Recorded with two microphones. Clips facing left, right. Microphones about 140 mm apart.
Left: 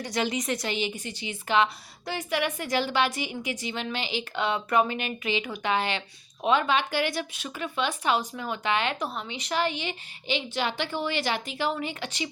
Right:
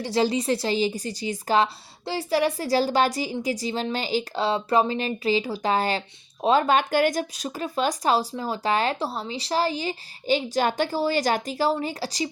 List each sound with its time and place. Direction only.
0.0 s a woman's voice: 30° right (ahead or behind)